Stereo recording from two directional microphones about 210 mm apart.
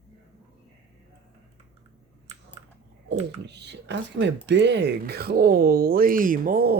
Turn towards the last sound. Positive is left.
turn(degrees=-45)  # may be behind; listen again after turning